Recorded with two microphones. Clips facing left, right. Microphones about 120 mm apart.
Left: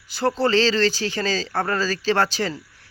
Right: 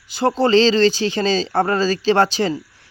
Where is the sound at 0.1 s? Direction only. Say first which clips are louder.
Right 5 dB; 20° right (ahead or behind).